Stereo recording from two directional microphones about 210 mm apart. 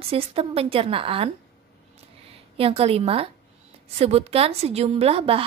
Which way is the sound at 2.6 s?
25° right (ahead or behind).